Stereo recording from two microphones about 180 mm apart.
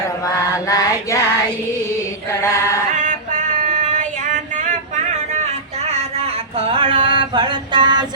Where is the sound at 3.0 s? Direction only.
45° right (ahead or behind).